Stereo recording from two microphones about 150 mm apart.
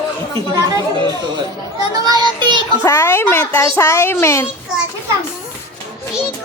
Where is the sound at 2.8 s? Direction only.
20° left (ahead or behind).